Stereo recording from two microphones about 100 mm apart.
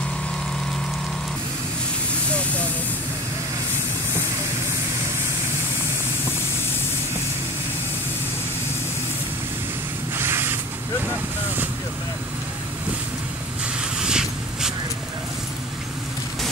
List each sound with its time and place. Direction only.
10.1 s vehicle: 25° right (ahead or behind)
13.9 s vehicle: 5° right (ahead or behind)